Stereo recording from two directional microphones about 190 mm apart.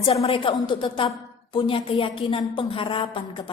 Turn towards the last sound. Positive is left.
turn(degrees=25)  # may be behind; listen again after turning